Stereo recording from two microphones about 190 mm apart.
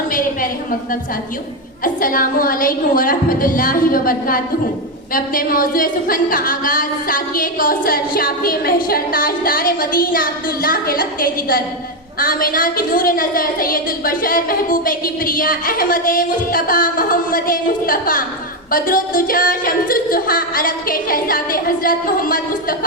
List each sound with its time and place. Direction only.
0.1 s a woman's voice: 45° left (ahead or behind)
1.8 s a woman's voice: 45° left (ahead or behind)